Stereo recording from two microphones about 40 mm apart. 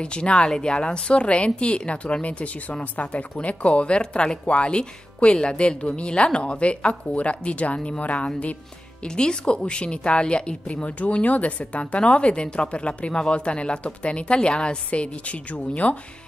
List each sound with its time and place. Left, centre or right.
0.0 s speech: left
9.0 s speech: left